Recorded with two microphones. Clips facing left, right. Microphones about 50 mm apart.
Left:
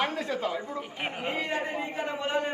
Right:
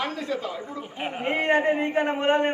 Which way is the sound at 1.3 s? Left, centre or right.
Right.